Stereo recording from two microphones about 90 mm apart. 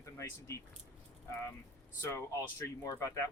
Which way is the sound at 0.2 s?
35° left (ahead or behind).